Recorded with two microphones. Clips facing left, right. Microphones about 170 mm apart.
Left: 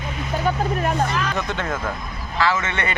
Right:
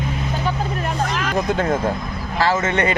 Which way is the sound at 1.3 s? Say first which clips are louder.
Right 6 dB; 35° right (ahead or behind).